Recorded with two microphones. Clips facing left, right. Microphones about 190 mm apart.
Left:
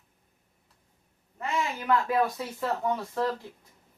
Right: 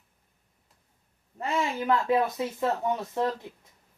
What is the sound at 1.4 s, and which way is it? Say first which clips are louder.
Speech: right 2 dB; 25° right (ahead or behind).